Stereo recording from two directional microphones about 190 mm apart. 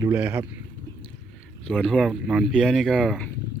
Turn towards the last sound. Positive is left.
turn(degrees=5)  # may be behind; listen again after turning